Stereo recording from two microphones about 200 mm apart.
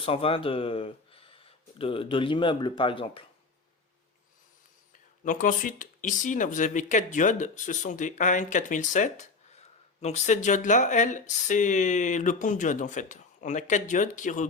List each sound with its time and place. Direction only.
0.0 s speech: 30° left (ahead or behind)
5.2 s speech: 40° left (ahead or behind)